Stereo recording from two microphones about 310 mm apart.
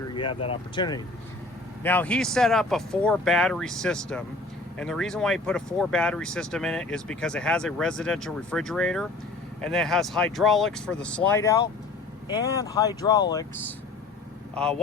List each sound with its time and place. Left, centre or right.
0.1 s vehicle: centre
0.4 s speech: centre